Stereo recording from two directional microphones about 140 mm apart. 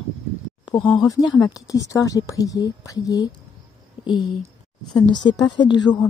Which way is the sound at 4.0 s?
35° left (ahead or behind).